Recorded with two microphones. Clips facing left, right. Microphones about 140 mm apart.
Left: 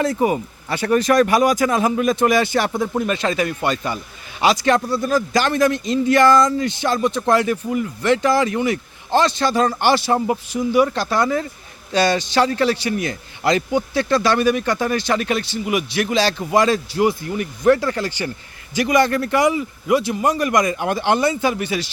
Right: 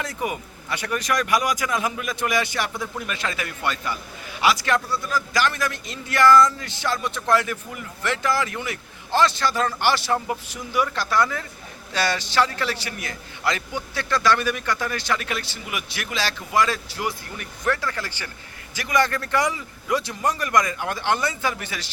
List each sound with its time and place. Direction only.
0.0 s speech: 30° left (ahead or behind)
2.6 s speech: 45° left (ahead or behind)
3.0 s a man's voice: 30° left (ahead or behind)
4.9 s speech: 45° left (ahead or behind)
5.3 s a man's voice: 25° left (ahead or behind)
14.6 s a man's voice: 30° left (ahead or behind)